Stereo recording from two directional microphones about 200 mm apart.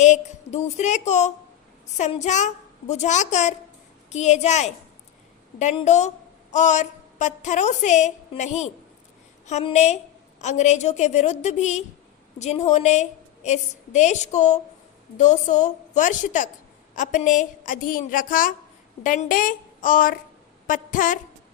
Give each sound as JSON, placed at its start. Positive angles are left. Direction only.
{"t": 0.0, "sound": "a woman's voice", "side_deg": 35}
{"t": 5.7, "sound": "a woman's voice", "side_deg": 35}